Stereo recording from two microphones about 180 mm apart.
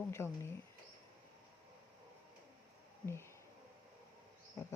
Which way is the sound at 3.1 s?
15° left (ahead or behind).